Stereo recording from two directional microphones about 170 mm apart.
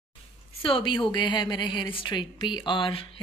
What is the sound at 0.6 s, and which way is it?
A woman's voice, 30° left (ahead or behind).